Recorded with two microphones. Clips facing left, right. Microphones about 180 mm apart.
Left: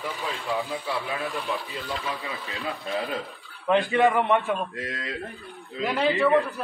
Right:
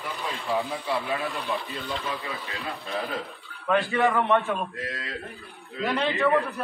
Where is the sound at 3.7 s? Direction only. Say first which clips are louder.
Left 2 dB; 20° left (ahead or behind).